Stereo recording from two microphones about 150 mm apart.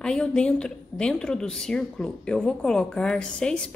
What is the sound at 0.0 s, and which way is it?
A woman's voice, 5° left (ahead or behind).